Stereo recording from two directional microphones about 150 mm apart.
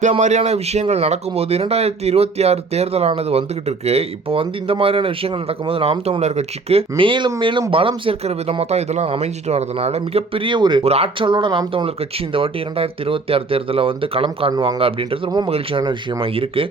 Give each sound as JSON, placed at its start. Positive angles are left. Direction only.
{"t": 0.2, "sound": "speech", "side_deg": -50}
{"t": 10.8, "sound": "speech", "side_deg": -40}
{"t": 15.8, "sound": "speech", "side_deg": -30}